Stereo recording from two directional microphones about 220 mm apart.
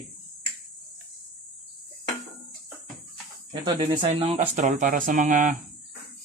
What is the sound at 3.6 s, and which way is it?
Speech, 20° right (ahead or behind).